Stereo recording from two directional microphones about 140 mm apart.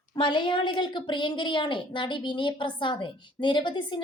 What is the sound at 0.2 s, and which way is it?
A woman's voice, 35° left (ahead or behind).